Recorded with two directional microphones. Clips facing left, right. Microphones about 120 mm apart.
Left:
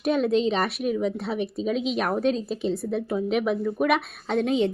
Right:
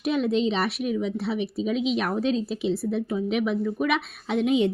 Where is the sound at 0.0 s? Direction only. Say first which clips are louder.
Left 1 dB; 50° left (ahead or behind).